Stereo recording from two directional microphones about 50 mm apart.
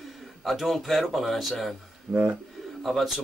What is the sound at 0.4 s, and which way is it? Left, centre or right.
Speech, centre.